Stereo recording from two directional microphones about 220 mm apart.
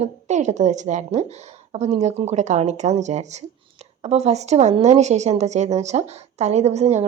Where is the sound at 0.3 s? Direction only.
35° right (ahead or behind).